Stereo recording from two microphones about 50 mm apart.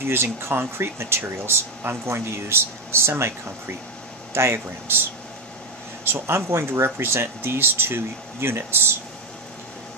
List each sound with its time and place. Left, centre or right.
0.0 s speech: right
6.2 s speech: right